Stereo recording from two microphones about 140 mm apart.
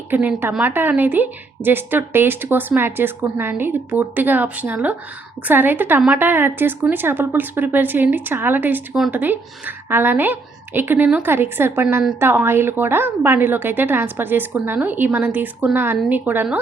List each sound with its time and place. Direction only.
0.1 s a woman's voice: 15° right (ahead or behind)